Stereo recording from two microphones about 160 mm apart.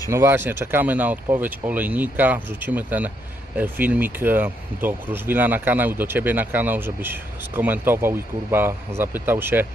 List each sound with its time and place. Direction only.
0.1 s speech: 15° right (ahead or behind)